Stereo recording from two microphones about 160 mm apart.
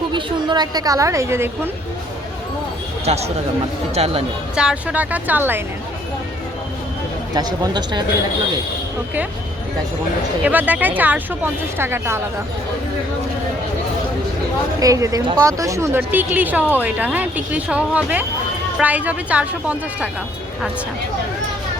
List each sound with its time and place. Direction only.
0.1 s a woman's voice: 30° right (ahead or behind)
3.1 s speech: 40° right (ahead or behind)
4.5 s speech: 5° right (ahead or behind)
7.3 s a woman's voice: 25° right (ahead or behind)
10.4 s speech: 10° right (ahead or behind)
14.8 s speech: 20° right (ahead or behind)